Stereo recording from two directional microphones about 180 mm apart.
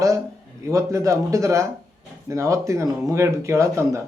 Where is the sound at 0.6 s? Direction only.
15° right (ahead or behind).